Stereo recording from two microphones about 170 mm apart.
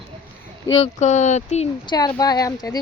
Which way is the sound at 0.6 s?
30° left (ahead or behind).